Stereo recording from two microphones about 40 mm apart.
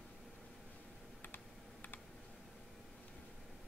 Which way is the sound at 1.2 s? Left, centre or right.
Left.